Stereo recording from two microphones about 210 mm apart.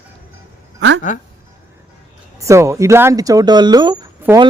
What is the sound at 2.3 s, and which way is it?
Speech, 15° right (ahead or behind).